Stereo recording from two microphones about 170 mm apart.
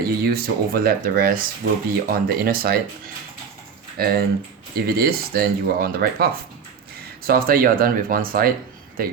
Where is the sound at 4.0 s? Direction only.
65° right (ahead or behind).